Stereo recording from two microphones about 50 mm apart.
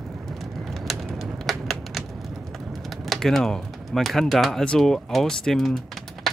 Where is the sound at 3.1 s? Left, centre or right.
Centre.